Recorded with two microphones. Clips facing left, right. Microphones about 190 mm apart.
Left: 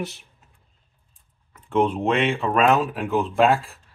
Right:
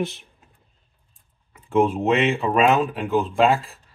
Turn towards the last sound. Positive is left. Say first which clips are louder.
# even
turn(degrees=0)  # may be behind; listen again after turning